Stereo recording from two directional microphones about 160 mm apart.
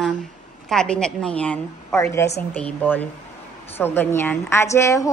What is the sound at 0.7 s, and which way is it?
A woman's voice, 5° left (ahead or behind).